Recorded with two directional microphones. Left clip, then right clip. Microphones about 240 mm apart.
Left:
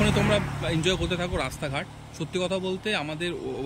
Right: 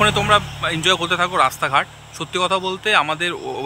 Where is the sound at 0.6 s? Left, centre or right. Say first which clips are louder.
Right 8 dB; centre.